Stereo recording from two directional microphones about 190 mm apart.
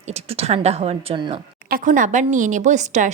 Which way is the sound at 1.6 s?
45° right (ahead or behind).